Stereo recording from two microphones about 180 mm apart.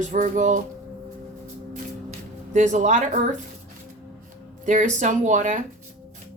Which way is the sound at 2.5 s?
40° right (ahead or behind).